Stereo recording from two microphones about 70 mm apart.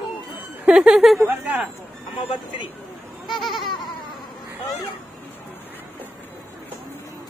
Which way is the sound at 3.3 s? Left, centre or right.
Centre.